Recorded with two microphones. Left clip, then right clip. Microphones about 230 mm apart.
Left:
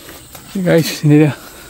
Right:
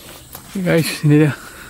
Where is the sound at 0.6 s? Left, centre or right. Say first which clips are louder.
Left 4 dB; centre.